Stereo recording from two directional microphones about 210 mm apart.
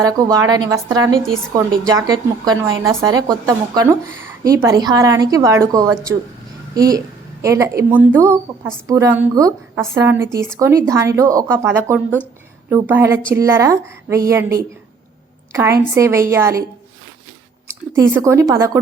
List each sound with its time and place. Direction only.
0.0 s a woman's voice: 15° right (ahead or behind)
18.1 s a woman's voice: 15° right (ahead or behind)